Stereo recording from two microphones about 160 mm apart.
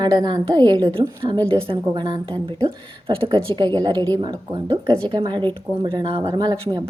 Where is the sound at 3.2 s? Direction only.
35° right (ahead or behind).